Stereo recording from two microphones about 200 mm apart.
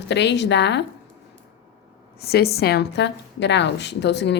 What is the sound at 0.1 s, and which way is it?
Speech, 60° left (ahead or behind).